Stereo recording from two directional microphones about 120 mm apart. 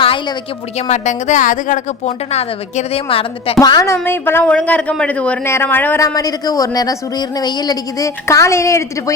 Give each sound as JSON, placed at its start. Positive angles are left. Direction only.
{"t": 0.0, "sound": "a sound", "side_deg": 45}
{"t": 0.8, "sound": "a woman's voice", "side_deg": 85}
{"t": 3.6, "sound": "speech", "side_deg": 30}
{"t": 4.0, "sound": "speech", "side_deg": 20}
{"t": 6.1, "sound": "speech", "side_deg": 30}